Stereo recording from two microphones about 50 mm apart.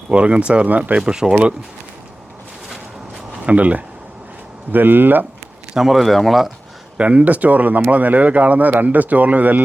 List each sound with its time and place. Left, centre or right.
0.1 s speech: right
1.1 s speech: centre
3.4 s speech: right
5.7 s speech: centre
6.9 s speech: right